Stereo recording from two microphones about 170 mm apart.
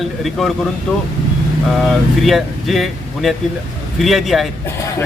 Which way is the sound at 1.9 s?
Centre (ahead or behind).